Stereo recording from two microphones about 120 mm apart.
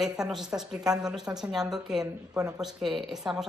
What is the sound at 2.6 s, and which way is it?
Speech, centre (ahead or behind).